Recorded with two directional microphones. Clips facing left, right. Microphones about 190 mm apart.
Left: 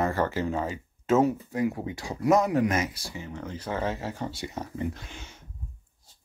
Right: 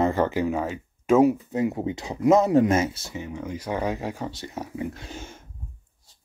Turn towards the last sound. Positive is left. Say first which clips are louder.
# right 7 dB
turn(degrees=-45)  # may be behind; listen again after turning